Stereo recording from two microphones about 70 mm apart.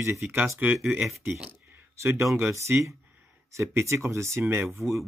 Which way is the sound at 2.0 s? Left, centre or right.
Right.